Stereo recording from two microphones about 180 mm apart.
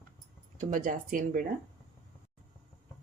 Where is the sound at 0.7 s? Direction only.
50° right (ahead or behind).